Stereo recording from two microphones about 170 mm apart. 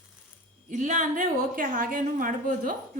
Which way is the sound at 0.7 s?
45° right (ahead or behind).